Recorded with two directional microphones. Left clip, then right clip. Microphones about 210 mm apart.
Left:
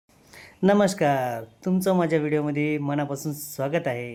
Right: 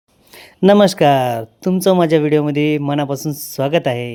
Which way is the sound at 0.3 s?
35° right (ahead or behind).